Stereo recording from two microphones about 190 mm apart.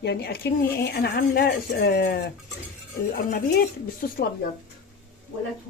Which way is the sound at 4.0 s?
50° left (ahead or behind).